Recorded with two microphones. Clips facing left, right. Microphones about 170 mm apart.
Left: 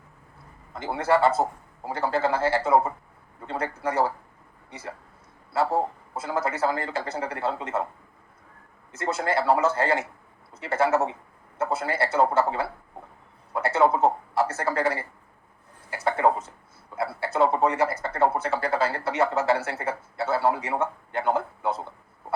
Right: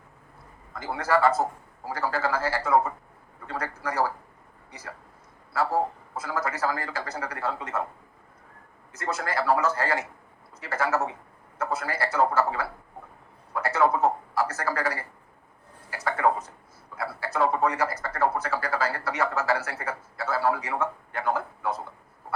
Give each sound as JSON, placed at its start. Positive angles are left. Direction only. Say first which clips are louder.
{"t": 0.7, "sound": "speech", "louder": "left 2 dB", "side_deg": 25}
{"t": 8.9, "sound": "a man's voice", "louder": "left 4 dB", "side_deg": 25}